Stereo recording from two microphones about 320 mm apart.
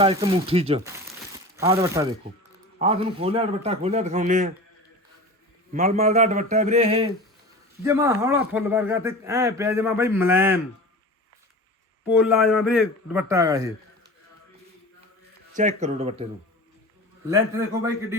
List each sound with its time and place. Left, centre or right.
0.0 s a man's voice: centre
5.7 s a man's voice: right
12.0 s a man's voice: centre
15.5 s a man's voice: right
17.2 s speech: centre